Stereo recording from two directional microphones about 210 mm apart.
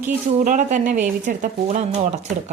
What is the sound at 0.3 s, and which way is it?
Speech, 35° right (ahead or behind).